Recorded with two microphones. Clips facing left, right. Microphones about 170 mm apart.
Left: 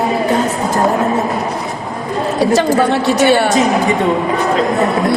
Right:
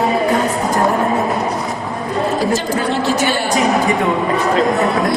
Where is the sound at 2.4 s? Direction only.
65° left (ahead or behind).